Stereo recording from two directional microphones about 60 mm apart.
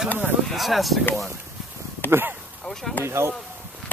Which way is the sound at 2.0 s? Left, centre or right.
Right.